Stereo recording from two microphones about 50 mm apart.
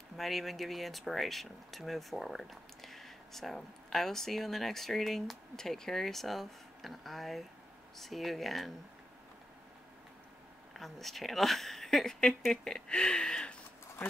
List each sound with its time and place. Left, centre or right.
0.2 s speech: centre
10.7 s speech: centre